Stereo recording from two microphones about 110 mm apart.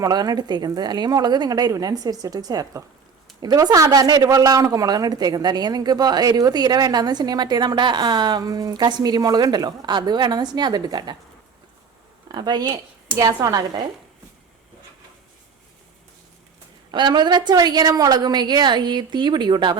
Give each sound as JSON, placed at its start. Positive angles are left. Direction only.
{"t": 0.0, "sound": "a woman's voice", "side_deg": -35}
{"t": 12.3, "sound": "a woman's voice", "side_deg": -40}
{"t": 16.9, "sound": "a woman's voice", "side_deg": -45}